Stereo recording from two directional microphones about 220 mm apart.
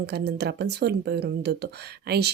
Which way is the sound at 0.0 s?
45° right (ahead or behind).